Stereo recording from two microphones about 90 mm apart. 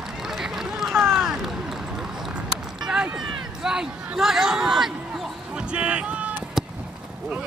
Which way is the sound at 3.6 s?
5° right (ahead or behind).